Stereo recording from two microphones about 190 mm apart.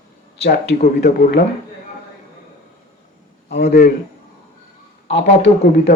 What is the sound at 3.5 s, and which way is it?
Speech, 60° left (ahead or behind).